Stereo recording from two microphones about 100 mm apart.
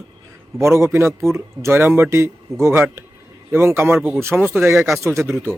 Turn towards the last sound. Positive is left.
turn(degrees=-25)  # may be behind; listen again after turning